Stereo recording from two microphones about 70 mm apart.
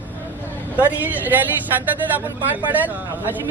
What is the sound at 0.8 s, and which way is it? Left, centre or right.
A man's voice, right.